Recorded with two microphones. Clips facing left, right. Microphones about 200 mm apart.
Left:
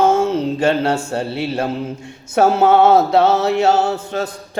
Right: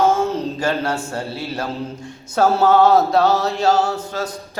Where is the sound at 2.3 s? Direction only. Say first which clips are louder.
Left 2 dB; 20° left (ahead or behind).